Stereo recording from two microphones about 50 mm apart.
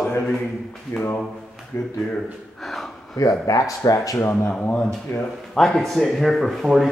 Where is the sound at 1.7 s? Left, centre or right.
Left.